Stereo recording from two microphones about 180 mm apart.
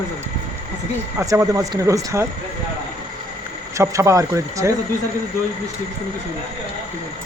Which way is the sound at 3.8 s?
15° right (ahead or behind).